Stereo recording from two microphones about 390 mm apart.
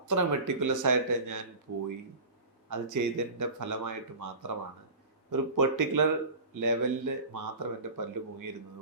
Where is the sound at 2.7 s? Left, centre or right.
Right.